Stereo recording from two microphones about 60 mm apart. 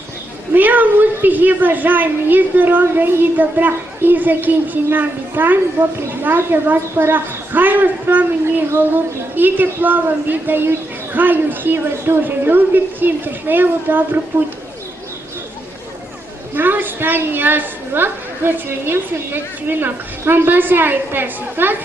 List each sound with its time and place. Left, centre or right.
0.5 s a woman's voice: right
16.6 s a woman's voice: right